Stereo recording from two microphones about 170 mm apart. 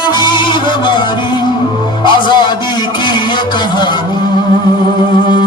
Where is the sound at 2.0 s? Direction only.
25° left (ahead or behind).